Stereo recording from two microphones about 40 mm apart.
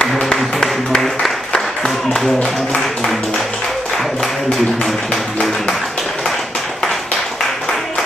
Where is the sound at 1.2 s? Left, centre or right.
Centre.